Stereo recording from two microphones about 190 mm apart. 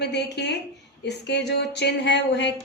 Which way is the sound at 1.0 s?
65° left (ahead or behind).